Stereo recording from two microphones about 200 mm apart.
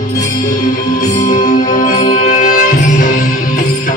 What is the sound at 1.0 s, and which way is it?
Music, 40° left (ahead or behind).